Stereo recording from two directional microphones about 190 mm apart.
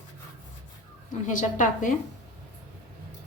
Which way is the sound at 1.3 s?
45° left (ahead or behind).